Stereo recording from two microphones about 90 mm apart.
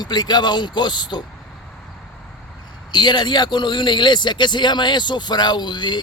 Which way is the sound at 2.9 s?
55° left (ahead or behind).